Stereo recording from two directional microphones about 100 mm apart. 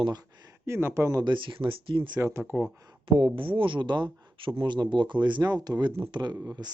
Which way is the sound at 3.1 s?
55° right (ahead or behind).